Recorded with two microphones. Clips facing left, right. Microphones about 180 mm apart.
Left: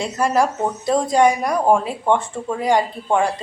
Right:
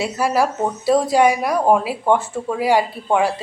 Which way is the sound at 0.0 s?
5° right (ahead or behind).